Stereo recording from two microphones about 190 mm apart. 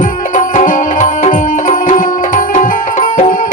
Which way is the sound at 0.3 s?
45° left (ahead or behind).